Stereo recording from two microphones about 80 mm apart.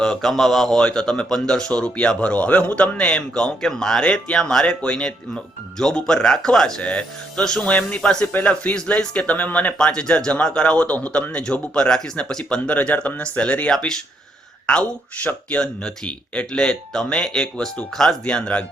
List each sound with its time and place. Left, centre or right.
0.0 s speech: centre